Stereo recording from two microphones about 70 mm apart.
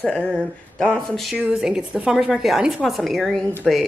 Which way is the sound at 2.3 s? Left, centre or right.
Centre.